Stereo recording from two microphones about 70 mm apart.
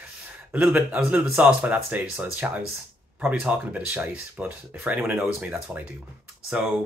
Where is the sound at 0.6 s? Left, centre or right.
Right.